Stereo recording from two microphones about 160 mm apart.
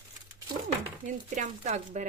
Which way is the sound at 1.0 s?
50° right (ahead or behind).